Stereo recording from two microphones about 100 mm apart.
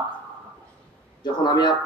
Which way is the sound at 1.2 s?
45° left (ahead or behind).